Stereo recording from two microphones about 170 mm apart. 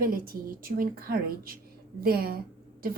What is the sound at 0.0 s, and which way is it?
A woman's voice, 60° right (ahead or behind).